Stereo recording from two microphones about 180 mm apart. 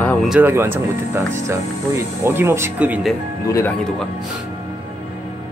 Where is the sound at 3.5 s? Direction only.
10° left (ahead or behind).